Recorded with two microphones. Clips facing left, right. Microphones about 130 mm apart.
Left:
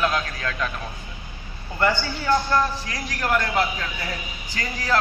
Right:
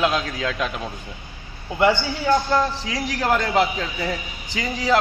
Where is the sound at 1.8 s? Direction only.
15° right (ahead or behind).